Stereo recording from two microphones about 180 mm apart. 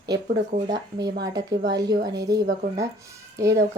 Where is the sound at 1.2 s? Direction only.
20° right (ahead or behind).